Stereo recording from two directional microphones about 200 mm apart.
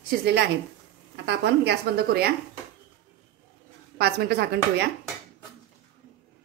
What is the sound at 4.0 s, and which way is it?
Speech, 55° right (ahead or behind).